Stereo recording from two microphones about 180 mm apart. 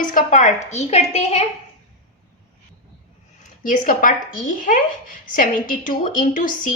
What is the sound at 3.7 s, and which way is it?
A woman's voice, 45° left (ahead or behind).